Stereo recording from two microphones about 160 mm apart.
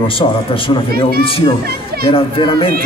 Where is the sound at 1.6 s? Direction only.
75° right (ahead or behind).